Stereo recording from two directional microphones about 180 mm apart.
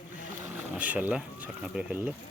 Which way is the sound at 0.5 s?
10° right (ahead or behind).